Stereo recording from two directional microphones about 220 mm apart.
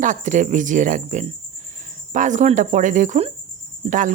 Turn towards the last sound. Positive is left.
turn(degrees=-35)  # may be behind; listen again after turning